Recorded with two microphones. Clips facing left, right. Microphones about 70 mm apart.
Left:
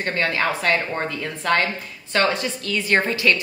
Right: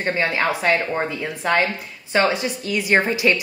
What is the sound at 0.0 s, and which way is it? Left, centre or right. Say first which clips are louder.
A woman's voice: right 1 dB; centre.